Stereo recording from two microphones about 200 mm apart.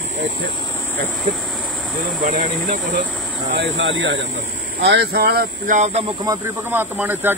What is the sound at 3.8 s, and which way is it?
Speech, 70° right (ahead or behind).